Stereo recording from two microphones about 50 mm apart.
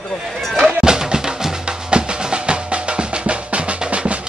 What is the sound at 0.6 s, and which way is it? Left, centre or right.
Drum, centre.